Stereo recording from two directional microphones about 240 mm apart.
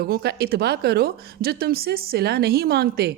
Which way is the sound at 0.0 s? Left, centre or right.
Right.